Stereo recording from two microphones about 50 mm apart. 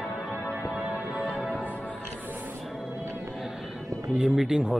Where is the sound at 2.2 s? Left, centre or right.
Right.